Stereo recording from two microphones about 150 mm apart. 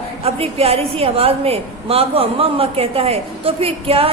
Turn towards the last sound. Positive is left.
turn(degrees=-40)  # may be behind; listen again after turning